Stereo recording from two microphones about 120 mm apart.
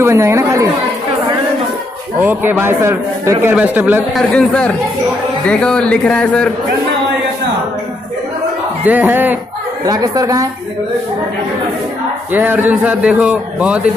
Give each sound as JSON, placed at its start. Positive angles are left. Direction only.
{"t": 0.0, "sound": "a man's voice", "side_deg": -20}
{"t": 2.2, "sound": "a man's voice", "side_deg": -15}
{"t": 4.3, "sound": "a man's voice", "side_deg": 10}
{"t": 8.8, "sound": "a man's voice", "side_deg": -15}
{"t": 9.8, "sound": "a man's voice", "side_deg": -30}
{"t": 12.3, "sound": "a man's voice", "side_deg": -15}